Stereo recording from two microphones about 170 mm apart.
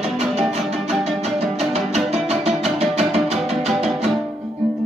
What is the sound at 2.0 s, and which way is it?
Music, 35° right (ahead or behind).